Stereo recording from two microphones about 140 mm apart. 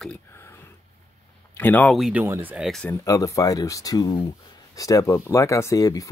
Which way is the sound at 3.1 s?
25° left (ahead or behind).